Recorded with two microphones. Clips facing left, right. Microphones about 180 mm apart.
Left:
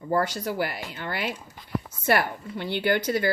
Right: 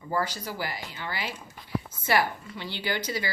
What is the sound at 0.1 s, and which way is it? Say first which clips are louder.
Speech: left 5 dB; 60° left (ahead or behind).